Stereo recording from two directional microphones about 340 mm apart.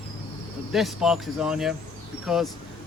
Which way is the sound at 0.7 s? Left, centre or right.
Centre.